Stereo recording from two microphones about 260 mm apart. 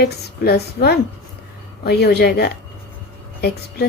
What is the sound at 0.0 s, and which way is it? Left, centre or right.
Speech, left.